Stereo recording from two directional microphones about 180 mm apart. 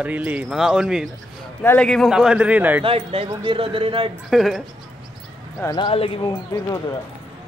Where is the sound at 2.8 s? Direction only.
30° right (ahead or behind).